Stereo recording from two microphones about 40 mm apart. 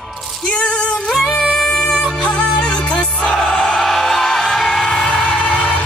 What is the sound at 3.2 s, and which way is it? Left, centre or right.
Music, centre.